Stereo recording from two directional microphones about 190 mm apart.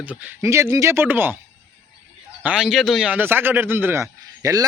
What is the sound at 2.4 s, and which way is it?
A man's voice, 5° right (ahead or behind).